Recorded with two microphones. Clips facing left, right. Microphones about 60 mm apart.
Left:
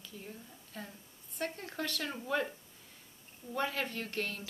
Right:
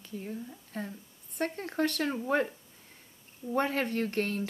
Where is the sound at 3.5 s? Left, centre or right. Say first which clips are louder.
Right 6 dB; right.